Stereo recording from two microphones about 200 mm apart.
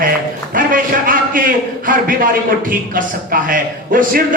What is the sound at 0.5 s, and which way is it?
A man's voice, 45° right (ahead or behind).